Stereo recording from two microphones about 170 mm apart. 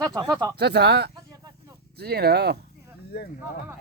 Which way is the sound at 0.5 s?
75° right (ahead or behind).